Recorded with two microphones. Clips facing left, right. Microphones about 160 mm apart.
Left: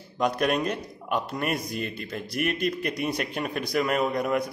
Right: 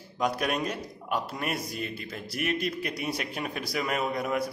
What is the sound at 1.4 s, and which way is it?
Speech, 55° left (ahead or behind).